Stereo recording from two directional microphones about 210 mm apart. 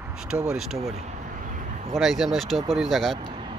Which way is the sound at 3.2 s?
25° right (ahead or behind).